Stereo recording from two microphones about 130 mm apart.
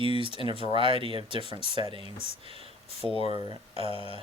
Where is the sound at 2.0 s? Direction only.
50° left (ahead or behind).